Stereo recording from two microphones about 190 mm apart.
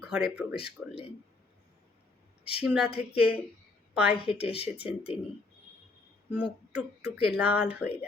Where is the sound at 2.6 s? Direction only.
5° right (ahead or behind).